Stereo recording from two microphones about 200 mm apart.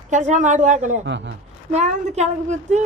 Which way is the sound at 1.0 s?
65° right (ahead or behind).